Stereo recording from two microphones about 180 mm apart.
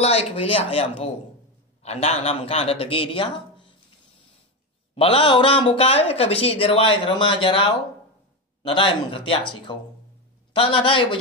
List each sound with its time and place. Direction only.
0.0 s a man's voice: 35° left (ahead or behind)
4.9 s speech: 30° left (ahead or behind)
8.6 s speech: 30° left (ahead or behind)